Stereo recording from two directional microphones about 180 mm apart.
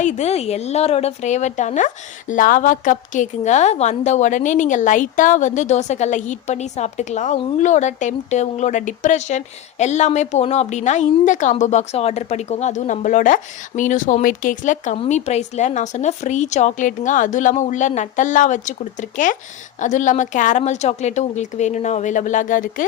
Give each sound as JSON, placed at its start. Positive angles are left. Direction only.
{"t": 0.0, "sound": "a woman's voice", "side_deg": 40}